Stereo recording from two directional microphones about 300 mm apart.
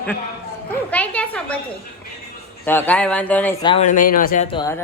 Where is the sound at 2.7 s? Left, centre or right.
Centre.